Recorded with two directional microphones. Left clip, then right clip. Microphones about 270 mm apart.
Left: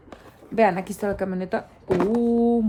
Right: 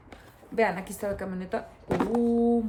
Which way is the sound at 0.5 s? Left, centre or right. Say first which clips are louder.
Left 6 dB; left.